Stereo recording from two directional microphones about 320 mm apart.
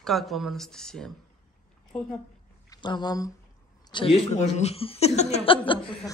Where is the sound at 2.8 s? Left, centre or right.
Centre.